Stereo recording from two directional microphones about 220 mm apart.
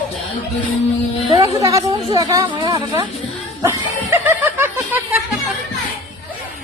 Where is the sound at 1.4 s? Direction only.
15° right (ahead or behind).